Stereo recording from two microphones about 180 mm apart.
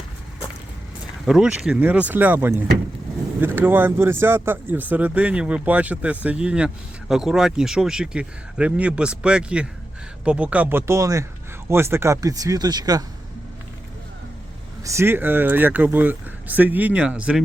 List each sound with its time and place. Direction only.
1.2 s speech: 5° right (ahead or behind); by 13.1 s 20° right (ahead or behind)
14.8 s speech: 15° right (ahead or behind)